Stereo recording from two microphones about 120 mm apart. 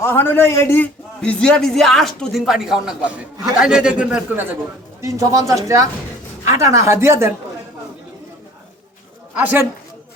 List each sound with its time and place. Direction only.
0.0 s a man's voice: 20° left (ahead or behind)
1.2 s a man's voice: 5° left (ahead or behind); by 4.4 s 10° right (ahead or behind)
4.9 s speech: 25° right (ahead or behind)
9.4 s a man's voice: 15° right (ahead or behind)